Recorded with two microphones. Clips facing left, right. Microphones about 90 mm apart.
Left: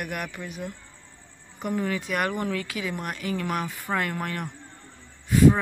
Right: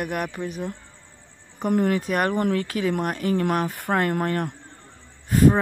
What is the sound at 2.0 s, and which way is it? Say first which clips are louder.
Speech: right 5 dB; 40° right (ahead or behind).